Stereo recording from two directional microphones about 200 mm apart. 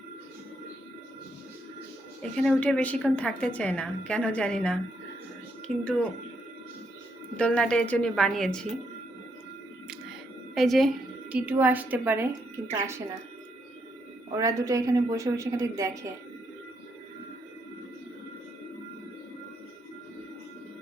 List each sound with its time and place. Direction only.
2.2 s a woman's voice: 5° left (ahead or behind)
7.3 s a woman's voice: 5° left (ahead or behind)
10.5 s a woman's voice: centre (ahead or behind)
14.3 s speech: 15° right (ahead or behind)